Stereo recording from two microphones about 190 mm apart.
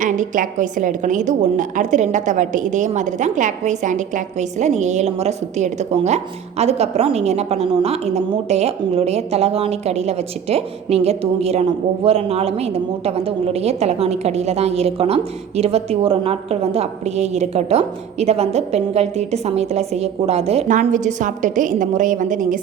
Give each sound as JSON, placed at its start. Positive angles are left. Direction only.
{"t": 0.0, "sound": "a woman's voice", "side_deg": -40}